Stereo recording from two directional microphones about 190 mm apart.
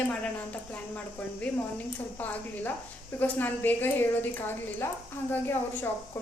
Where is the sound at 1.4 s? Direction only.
10° left (ahead or behind).